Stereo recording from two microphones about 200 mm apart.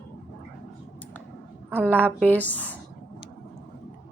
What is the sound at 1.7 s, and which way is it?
Speech, 10° right (ahead or behind).